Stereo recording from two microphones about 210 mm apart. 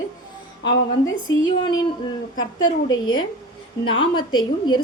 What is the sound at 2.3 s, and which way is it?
A woman's voice, 20° left (ahead or behind).